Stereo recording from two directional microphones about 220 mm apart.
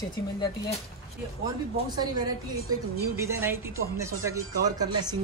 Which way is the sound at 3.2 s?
10° right (ahead or behind).